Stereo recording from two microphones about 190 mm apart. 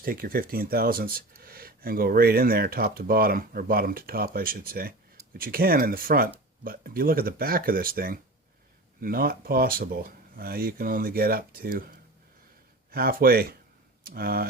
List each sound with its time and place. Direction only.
0.0 s speech: 50° right (ahead or behind)